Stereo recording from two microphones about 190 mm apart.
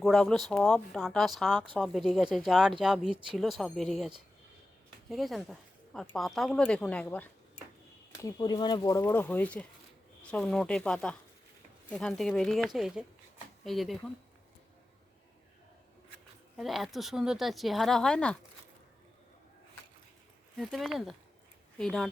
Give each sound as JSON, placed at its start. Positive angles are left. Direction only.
{"t": 0.0, "sound": "speech", "side_deg": 0}
{"t": 8.2, "sound": "speech", "side_deg": 20}
{"t": 16.6, "sound": "speech", "side_deg": 0}
{"t": 20.6, "sound": "speech", "side_deg": 0}